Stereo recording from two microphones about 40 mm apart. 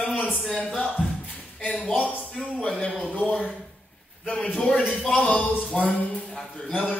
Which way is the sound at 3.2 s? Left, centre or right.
Left.